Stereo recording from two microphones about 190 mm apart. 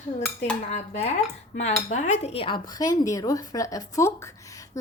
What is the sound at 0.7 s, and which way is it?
A woman's voice, 35° left (ahead or behind).